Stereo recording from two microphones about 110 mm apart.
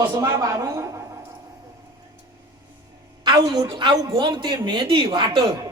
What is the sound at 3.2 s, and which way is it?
A woman's voice, 45° right (ahead or behind).